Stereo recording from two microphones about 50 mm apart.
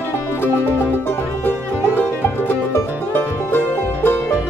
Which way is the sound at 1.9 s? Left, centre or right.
Left.